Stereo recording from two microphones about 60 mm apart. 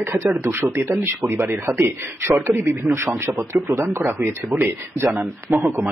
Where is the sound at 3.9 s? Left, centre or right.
Right.